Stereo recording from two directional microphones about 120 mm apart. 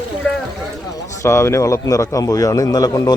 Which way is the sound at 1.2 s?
25° left (ahead or behind).